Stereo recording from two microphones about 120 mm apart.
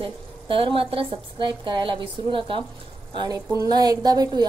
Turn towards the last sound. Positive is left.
turn(degrees=-35)  # may be behind; listen again after turning